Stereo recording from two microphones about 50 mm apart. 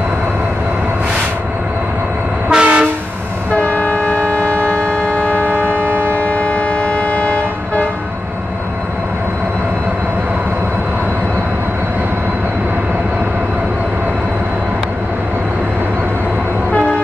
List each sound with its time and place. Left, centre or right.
2.5 s train: right
3.5 s train: left
5.6 s train: right
6.1 s train: left